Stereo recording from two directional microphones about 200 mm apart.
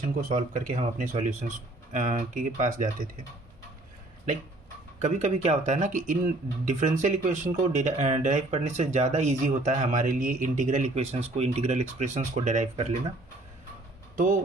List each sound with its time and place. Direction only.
0.2 s speech: 40° right (ahead or behind)
4.9 s speech: 35° right (ahead or behind)